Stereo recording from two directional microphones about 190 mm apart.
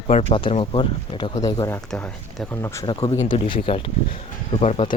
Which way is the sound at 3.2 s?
25° left (ahead or behind).